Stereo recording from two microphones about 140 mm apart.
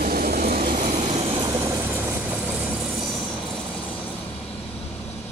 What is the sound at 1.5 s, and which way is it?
Vehicle, 20° right (ahead or behind).